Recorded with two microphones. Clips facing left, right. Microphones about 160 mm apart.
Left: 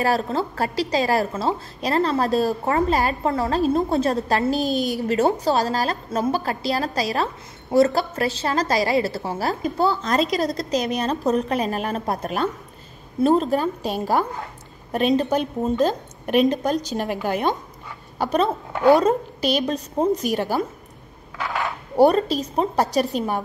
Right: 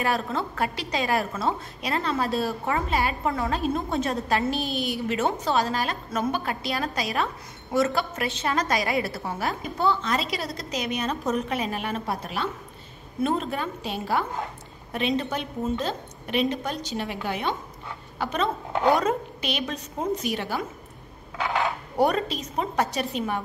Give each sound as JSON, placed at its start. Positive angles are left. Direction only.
{"t": 0.0, "sound": "a woman's voice", "side_deg": 35}
{"t": 13.2, "sound": "a woman's voice", "side_deg": 35}
{"t": 21.4, "sound": "a sound", "side_deg": -20}
{"t": 21.9, "sound": "a woman's voice", "side_deg": 35}